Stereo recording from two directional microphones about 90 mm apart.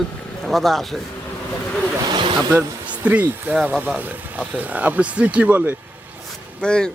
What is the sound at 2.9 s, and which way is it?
Speech, 15° right (ahead or behind).